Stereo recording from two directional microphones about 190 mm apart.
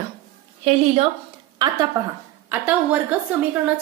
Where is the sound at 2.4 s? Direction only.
10° right (ahead or behind).